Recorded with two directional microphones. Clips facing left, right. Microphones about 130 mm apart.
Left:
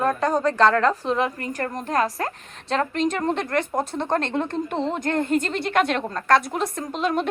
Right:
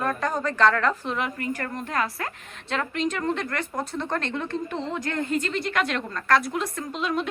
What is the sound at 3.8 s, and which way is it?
Speech, 25° left (ahead or behind).